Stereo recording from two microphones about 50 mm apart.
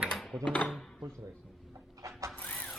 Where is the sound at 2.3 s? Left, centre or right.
Left.